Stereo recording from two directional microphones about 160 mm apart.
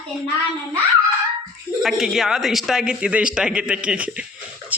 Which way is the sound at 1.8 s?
Centre (ahead or behind).